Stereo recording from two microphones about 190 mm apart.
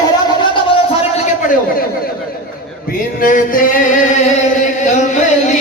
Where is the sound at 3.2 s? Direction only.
45° left (ahead or behind).